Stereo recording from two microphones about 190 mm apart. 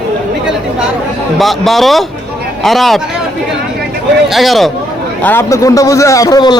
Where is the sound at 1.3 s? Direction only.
Centre (ahead or behind).